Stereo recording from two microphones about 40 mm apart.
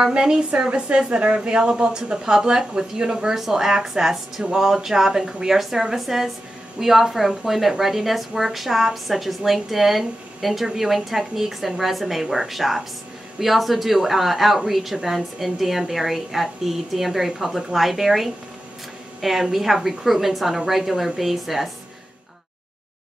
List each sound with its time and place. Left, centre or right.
0.0 s speech: centre
0.5 s a woman's voice: right
3.3 s a woman's voice: centre